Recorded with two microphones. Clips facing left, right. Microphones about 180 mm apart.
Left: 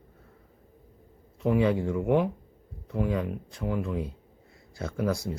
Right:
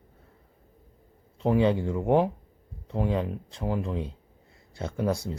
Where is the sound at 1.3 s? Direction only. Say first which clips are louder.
Right 1 dB; 30° right (ahead or behind).